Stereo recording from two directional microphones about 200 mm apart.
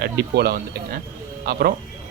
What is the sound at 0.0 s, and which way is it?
Speech, 55° right (ahead or behind).